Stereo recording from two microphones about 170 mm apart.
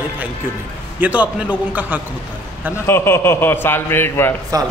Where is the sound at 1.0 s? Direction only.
10° right (ahead or behind).